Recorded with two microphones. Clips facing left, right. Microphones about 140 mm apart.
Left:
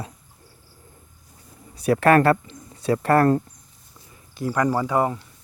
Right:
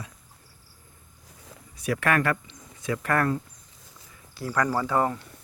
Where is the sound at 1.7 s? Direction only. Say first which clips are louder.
Left 8 dB; 35° left (ahead or behind).